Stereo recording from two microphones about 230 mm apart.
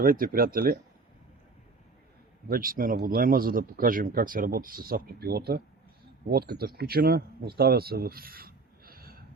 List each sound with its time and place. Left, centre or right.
0.0 s speech: right
2.5 s speech: right